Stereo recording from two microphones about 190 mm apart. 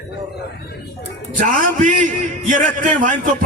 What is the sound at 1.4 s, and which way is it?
A man's voice, 45° right (ahead or behind).